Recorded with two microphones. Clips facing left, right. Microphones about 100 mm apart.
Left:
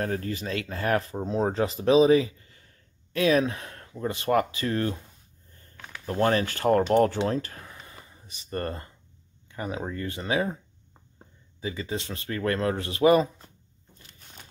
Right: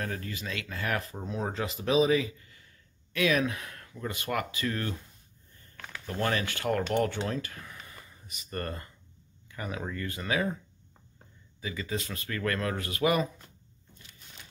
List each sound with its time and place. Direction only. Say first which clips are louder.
0.0 s speech: left 6 dB; 35° left (ahead or behind)
6.0 s speech: left 7 dB; 35° left (ahead or behind)